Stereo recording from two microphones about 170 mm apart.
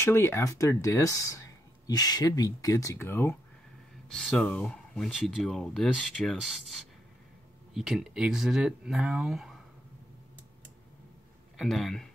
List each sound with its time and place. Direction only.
0.0 s speech: 15° left (ahead or behind)
4.1 s speech: 5° left (ahead or behind)
7.7 s speech: centre (ahead or behind)
11.5 s speech: centre (ahead or behind)